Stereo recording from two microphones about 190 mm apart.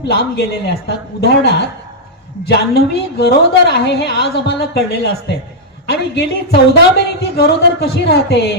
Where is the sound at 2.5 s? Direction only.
55° left (ahead or behind).